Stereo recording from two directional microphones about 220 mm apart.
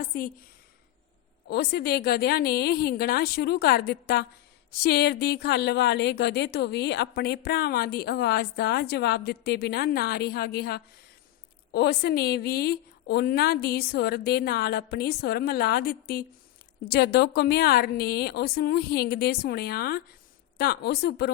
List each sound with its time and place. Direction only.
0.0 s speech: 40° left (ahead or behind)
1.5 s a woman's voice: 45° left (ahead or behind)